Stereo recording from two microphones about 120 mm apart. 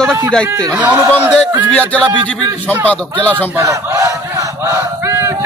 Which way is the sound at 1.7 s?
10° left (ahead or behind).